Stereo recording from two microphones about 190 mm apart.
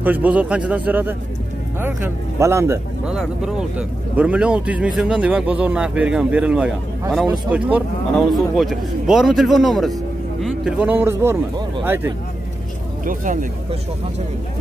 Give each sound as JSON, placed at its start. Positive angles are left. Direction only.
{"t": 0.0, "sound": "speech", "side_deg": -10}
{"t": 3.2, "sound": "speech", "side_deg": -5}
{"t": 13.0, "sound": "speech", "side_deg": -45}